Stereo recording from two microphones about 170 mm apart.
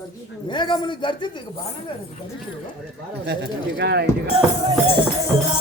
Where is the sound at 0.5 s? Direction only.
25° left (ahead or behind).